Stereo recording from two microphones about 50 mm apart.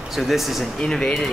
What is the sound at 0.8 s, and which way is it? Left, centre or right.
Speech, centre.